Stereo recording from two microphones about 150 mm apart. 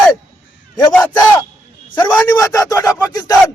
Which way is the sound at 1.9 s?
25° left (ahead or behind).